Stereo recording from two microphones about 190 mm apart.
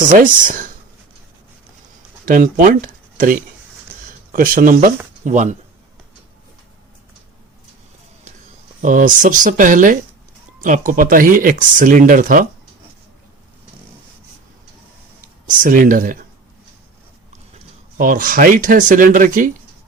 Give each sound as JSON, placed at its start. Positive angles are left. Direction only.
{"t": 0.1, "sound": "speech", "side_deg": -45}
{"t": 2.2, "sound": "speech", "side_deg": -45}
{"t": 8.8, "sound": "speech", "side_deg": -45}
{"t": 15.4, "sound": "speech", "side_deg": -45}
{"t": 17.5, "sound": "speech", "side_deg": -45}